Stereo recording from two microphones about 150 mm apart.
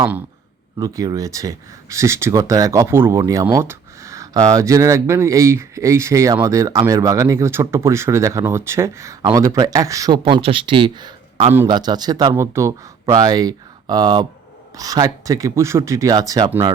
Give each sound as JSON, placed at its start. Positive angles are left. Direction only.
{"t": 0.8, "sound": "speech", "side_deg": -20}